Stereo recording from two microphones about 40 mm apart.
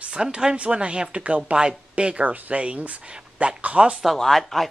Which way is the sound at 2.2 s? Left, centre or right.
Right.